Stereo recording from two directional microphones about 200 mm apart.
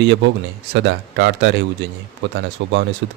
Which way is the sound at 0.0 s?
60° right (ahead or behind).